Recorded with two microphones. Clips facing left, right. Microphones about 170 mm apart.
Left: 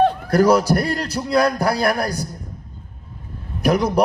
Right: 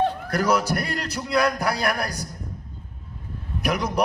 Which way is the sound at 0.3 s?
35° left (ahead or behind).